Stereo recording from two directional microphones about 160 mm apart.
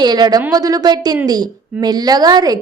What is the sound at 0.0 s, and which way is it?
A woman's voice, 25° right (ahead or behind).